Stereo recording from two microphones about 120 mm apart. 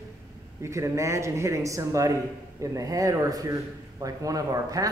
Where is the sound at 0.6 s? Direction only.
25° right (ahead or behind).